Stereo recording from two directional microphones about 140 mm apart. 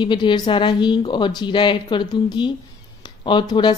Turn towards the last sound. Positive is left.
turn(degrees=35)  # may be behind; listen again after turning